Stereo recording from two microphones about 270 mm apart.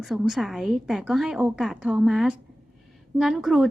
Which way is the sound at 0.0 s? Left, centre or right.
Centre.